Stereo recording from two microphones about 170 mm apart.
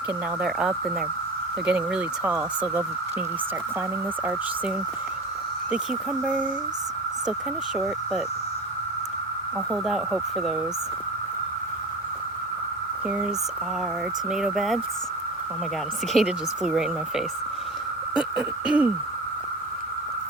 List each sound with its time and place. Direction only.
0.4 s speech: 5° right (ahead or behind)
5.7 s speech: 5° right (ahead or behind)
9.7 s speech: 5° right (ahead or behind)
13.1 s speech: 5° right (ahead or behind)
14.3 s speech: centre (ahead or behind)
16.1 s speech: 5° right (ahead or behind)